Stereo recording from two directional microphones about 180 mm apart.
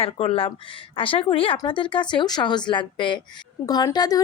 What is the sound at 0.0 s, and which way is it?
Speech, 30° left (ahead or behind).